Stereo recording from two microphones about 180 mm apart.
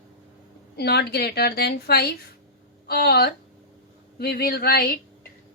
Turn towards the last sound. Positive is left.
turn(degrees=60)  # may be behind; listen again after turning